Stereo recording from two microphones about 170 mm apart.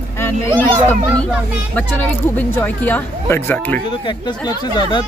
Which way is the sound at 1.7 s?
10° left (ahead or behind).